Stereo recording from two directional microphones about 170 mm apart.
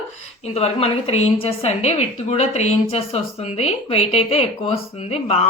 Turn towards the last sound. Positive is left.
turn(degrees=35)  # may be behind; listen again after turning